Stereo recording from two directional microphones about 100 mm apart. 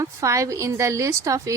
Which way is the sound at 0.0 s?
30° right (ahead or behind).